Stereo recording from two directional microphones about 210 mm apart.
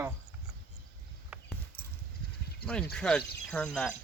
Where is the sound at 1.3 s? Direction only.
5° right (ahead or behind).